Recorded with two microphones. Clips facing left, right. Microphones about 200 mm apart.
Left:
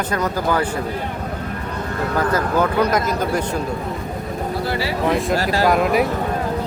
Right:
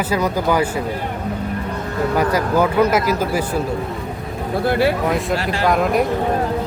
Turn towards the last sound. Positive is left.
turn(degrees=0)  # may be behind; listen again after turning